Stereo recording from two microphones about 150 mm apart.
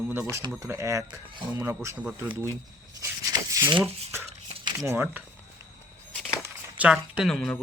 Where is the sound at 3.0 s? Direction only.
25° right (ahead or behind).